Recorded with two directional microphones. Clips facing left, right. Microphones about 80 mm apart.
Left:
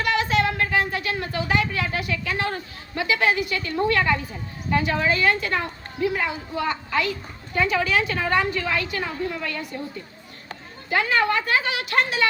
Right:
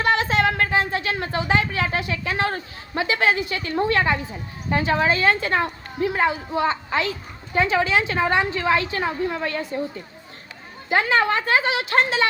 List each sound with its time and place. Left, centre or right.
0.0 s a woman's voice: right
10.8 s a woman's voice: right